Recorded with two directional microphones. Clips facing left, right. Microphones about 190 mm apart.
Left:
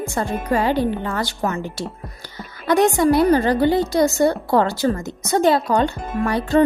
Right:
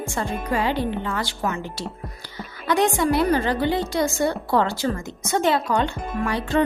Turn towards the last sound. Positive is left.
turn(degrees=40)  # may be behind; listen again after turning